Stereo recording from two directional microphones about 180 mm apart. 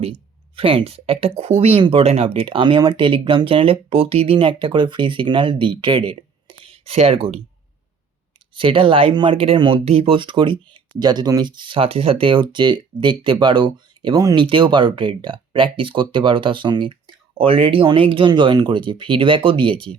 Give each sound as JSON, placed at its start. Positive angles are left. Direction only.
{"t": 0.0, "sound": "speech", "side_deg": -30}
{"t": 8.5, "sound": "speech", "side_deg": -30}